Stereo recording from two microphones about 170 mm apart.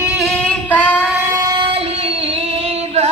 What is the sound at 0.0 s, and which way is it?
Female singing, 5° right (ahead or behind).